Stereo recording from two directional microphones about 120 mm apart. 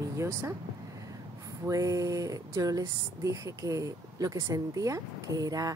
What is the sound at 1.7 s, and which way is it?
A woman's voice, 30° right (ahead or behind).